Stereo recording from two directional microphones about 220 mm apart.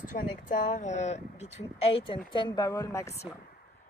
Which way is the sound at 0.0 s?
35° left (ahead or behind).